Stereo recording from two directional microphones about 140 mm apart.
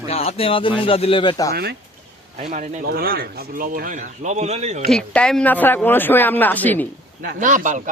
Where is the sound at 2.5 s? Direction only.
70° right (ahead or behind); by 4.8 s 50° right (ahead or behind).